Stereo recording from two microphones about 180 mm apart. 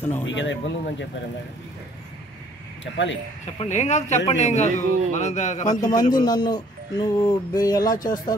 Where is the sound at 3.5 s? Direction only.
40° left (ahead or behind).